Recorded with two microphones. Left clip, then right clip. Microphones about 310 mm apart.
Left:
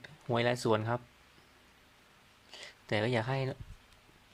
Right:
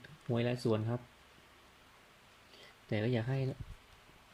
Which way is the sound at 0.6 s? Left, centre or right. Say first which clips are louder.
Left 5 dB; left.